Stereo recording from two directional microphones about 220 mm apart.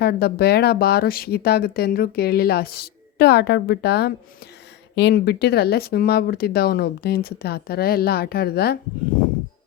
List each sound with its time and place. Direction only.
0.0 s speech: 45° left (ahead or behind)